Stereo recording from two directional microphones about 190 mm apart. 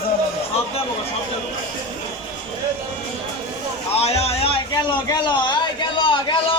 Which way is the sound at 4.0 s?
35° left (ahead or behind).